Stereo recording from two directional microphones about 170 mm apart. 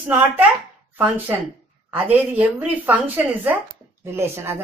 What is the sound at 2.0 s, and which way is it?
A woman's voice, 10° right (ahead or behind).